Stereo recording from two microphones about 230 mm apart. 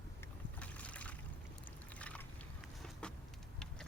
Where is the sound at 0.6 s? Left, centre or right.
Centre.